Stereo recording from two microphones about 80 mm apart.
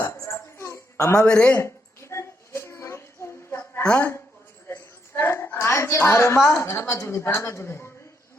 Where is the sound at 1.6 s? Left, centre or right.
Left.